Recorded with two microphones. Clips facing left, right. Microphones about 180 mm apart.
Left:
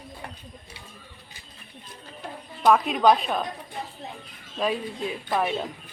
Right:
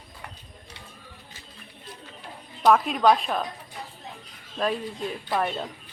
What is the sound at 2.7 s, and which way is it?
Speech, centre (ahead or behind).